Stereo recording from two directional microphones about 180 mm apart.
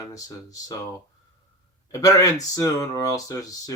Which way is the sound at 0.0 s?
20° left (ahead or behind).